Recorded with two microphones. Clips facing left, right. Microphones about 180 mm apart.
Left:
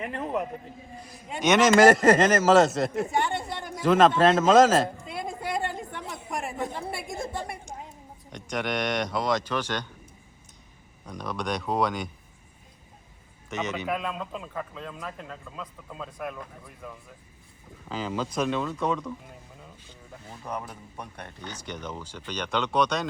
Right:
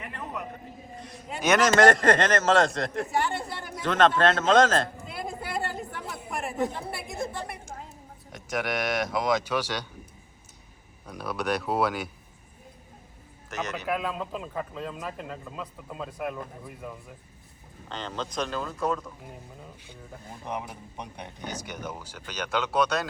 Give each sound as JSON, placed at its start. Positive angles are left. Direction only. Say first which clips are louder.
{"t": 0.0, "sound": "a man's voice", "louder": "left 7 dB", "side_deg": 50}
{"t": 1.0, "sound": "a man's voice", "louder": "left 2 dB", "side_deg": 0}
{"t": 11.0, "sound": "speech", "louder": "right 1 dB", "side_deg": -5}
{"t": 13.5, "sound": "speech", "louder": "left 1 dB", "side_deg": 0}
{"t": 17.8, "sound": "speech", "louder": "left 4 dB", "side_deg": 5}
{"t": 20.4, "sound": "speech", "louder": "even", "side_deg": -15}